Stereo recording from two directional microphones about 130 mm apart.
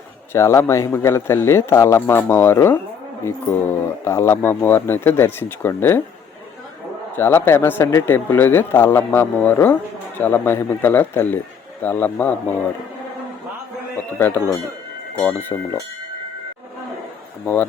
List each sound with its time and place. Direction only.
0.3 s speech: 20° left (ahead or behind)
7.2 s speech: 20° left (ahead or behind)
14.2 s speech: 15° left (ahead or behind)
17.4 s speech: 15° left (ahead or behind)